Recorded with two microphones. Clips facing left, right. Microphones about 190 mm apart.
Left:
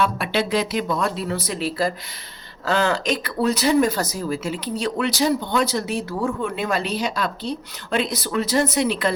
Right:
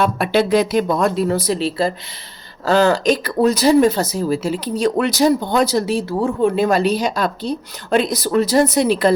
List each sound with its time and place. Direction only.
0.0 s speech: 45° right (ahead or behind)